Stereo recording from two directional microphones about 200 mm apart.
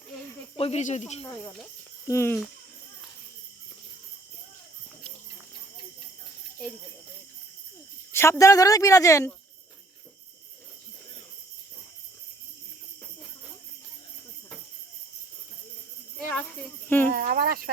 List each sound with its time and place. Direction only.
0.5 s speech: 30° left (ahead or behind)
1.3 s a woman's voice: 15° left (ahead or behind)
8.1 s a woman's voice: 15° left (ahead or behind)
16.1 s speech: 5° left (ahead or behind)
17.1 s cricket: 45° right (ahead or behind)